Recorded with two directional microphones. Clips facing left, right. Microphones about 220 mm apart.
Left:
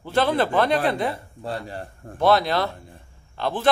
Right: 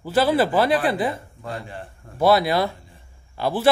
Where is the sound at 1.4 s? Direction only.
40° left (ahead or behind).